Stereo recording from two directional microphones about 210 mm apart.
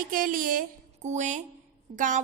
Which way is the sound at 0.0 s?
40° right (ahead or behind).